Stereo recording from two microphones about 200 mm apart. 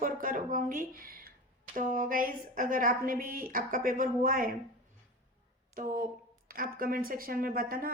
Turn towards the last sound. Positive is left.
turn(degrees=-45)  # may be behind; listen again after turning